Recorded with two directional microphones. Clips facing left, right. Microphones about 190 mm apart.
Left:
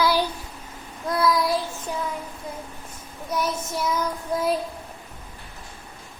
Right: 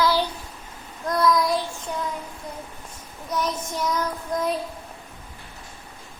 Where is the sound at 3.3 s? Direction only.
10° left (ahead or behind).